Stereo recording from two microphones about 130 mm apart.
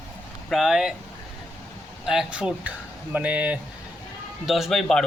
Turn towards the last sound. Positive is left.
turn(degrees=5)  # may be behind; listen again after turning